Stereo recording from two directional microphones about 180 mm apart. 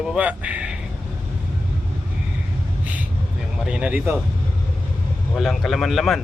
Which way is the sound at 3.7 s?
5° right (ahead or behind).